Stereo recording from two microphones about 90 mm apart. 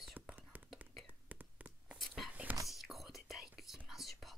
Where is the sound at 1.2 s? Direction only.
15° right (ahead or behind).